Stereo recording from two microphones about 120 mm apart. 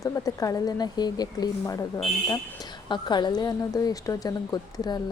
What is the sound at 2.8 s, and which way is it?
A woman's voice, 40° left (ahead or behind).